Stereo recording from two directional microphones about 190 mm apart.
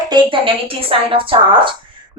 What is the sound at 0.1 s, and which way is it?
A woman's voice, 25° right (ahead or behind).